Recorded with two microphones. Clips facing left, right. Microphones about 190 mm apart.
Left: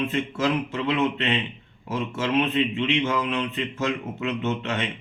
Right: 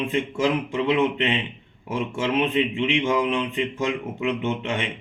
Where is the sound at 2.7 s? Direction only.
15° right (ahead or behind).